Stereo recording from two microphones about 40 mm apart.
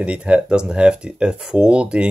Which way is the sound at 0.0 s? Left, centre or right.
Right.